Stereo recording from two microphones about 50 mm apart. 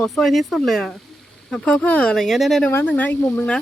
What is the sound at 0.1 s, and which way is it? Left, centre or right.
Speech, centre.